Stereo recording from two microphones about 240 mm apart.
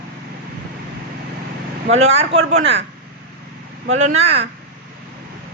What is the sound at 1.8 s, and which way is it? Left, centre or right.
Speech, right.